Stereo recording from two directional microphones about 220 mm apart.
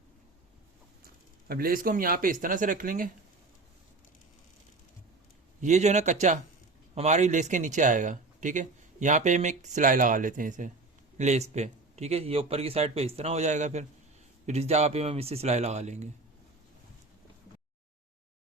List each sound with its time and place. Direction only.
1.0 s speech: 45° right (ahead or behind)
5.5 s speech: 30° right (ahead or behind)